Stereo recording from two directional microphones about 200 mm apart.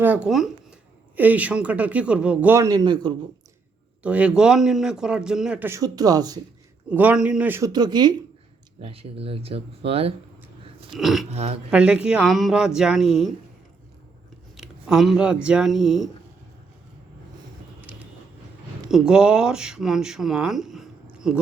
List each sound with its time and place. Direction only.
0.3 s a man's voice: centre (ahead or behind); by 3.2 s 20° right (ahead or behind)
4.0 s a man's voice: 5° right (ahead or behind)
6.9 s a man's voice: 10° right (ahead or behind); by 10.2 s 30° right (ahead or behind)
10.9 s a man's voice: centre (ahead or behind)
14.5 s a sound: centre (ahead or behind)
15.4 s a man's voice: 5° right (ahead or behind)
17.7 s vehicle: 5° right (ahead or behind)
18.9 s speech: 5° right (ahead or behind)